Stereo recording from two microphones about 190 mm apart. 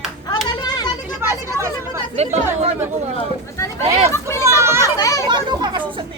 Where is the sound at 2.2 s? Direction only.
35° right (ahead or behind).